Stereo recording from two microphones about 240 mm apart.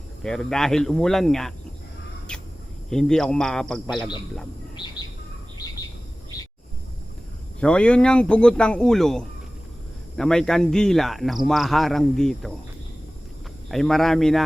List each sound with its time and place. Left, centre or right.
0.2 s speech: centre
2.3 s a sound: centre
2.9 s speech: centre
7.6 s speech: centre
13.7 s speech: centre